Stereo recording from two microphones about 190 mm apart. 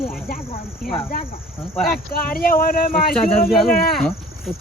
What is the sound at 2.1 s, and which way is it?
Speech, 50° left (ahead or behind).